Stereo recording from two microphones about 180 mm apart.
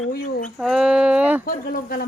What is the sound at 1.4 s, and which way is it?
Speech, 55° left (ahead or behind).